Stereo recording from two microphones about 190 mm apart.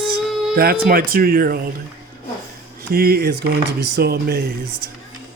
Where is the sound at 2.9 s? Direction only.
55° right (ahead or behind).